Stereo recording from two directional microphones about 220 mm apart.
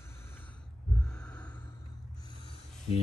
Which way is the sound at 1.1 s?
5° left (ahead or behind).